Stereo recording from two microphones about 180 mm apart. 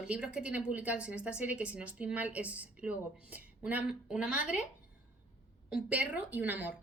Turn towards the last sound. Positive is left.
turn(degrees=-10)  # may be behind; listen again after turning